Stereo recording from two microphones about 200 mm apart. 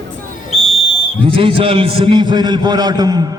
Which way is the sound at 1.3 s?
25° right (ahead or behind).